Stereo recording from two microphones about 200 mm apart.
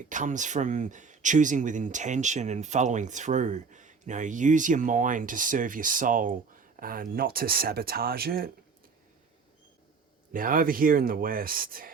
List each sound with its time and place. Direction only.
0.1 s speech: 40° right (ahead or behind)
10.3 s speech: 45° right (ahead or behind)